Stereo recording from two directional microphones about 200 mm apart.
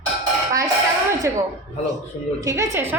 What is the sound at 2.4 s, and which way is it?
Speech, 15° right (ahead or behind).